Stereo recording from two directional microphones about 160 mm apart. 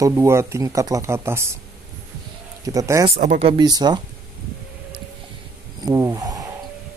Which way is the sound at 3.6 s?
25° right (ahead or behind).